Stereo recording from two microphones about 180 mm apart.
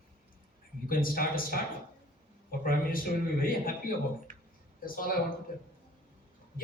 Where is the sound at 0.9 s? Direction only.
50° left (ahead or behind).